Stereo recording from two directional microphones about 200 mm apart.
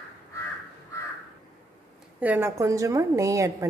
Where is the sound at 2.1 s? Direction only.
10° right (ahead or behind).